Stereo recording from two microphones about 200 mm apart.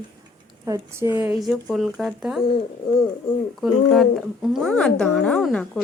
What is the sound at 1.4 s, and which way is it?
A woman's voice, centre (ahead or behind).